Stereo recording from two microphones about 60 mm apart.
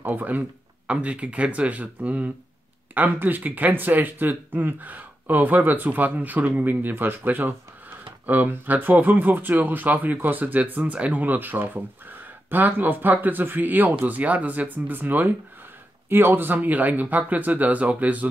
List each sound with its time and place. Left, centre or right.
0.0 s speech: right